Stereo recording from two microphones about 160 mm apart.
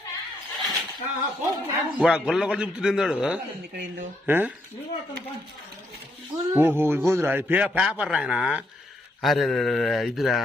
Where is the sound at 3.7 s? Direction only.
75° right (ahead or behind).